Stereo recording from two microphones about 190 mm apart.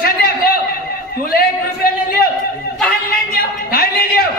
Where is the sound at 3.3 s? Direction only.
55° left (ahead or behind).